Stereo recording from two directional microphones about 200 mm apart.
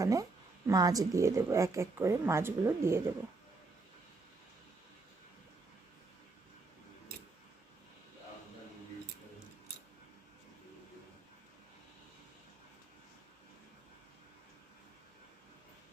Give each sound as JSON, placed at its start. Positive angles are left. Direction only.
{"t": 0.0, "sound": "a woman's voice", "side_deg": -15}